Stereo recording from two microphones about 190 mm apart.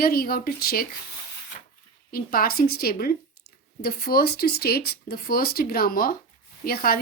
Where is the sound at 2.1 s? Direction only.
50° left (ahead or behind).